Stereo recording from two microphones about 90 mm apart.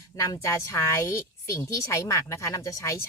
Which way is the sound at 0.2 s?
35° left (ahead or behind).